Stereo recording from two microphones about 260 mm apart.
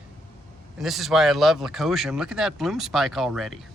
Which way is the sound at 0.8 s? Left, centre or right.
Centre.